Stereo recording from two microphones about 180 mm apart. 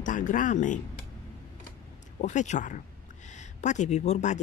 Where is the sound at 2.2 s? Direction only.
40° left (ahead or behind).